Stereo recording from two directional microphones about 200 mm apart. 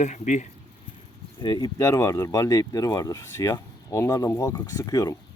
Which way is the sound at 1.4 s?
20° left (ahead or behind).